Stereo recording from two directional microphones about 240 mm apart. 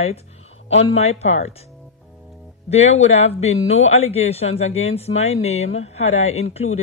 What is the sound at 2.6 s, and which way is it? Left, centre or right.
Speech, left.